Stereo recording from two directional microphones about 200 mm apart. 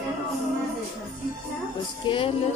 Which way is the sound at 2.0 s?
25° left (ahead or behind).